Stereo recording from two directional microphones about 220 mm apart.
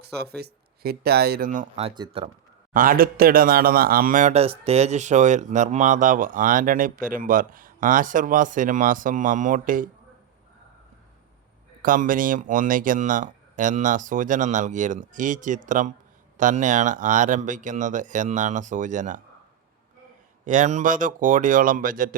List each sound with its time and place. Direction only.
0.0 s speech: 45° right (ahead or behind); by 2.3 s 25° right (ahead or behind)
2.7 s speech: 40° right (ahead or behind)
11.8 s speech: 40° right (ahead or behind)
20.4 s speech: 35° right (ahead or behind)